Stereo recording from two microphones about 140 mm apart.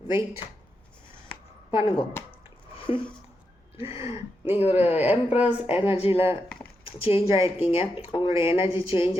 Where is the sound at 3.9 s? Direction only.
20° right (ahead or behind).